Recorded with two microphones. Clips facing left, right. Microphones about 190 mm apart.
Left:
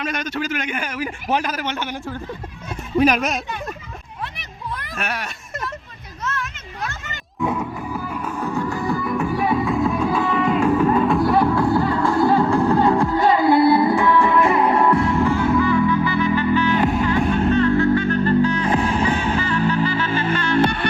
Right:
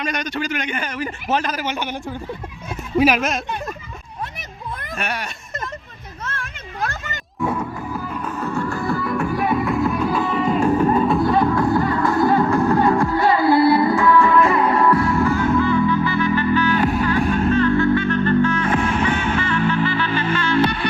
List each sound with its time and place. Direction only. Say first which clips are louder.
0.0 s a man's voice: even; 5° left (ahead or behind)
1.5 s a man's voice: right 1 dB; 10° right (ahead or behind)
4.9 s speech: right 2 dB; centre (ahead or behind)
6.2 s music: left 4 dB; 30° right (ahead or behind)
7.5 s a sound: even; centre (ahead or behind)
7.9 s music: even; 10° left (ahead or behind)
10.4 s music: right 1 dB; 35° right (ahead or behind)
11.4 s music: even; 10° left (ahead or behind)
17.3 s music: even; 35° left (ahead or behind)